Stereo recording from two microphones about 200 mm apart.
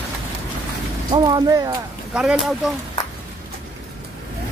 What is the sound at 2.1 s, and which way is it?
Speech, centre (ahead or behind).